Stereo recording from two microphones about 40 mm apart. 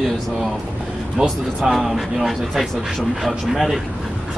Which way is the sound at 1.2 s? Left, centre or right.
Right.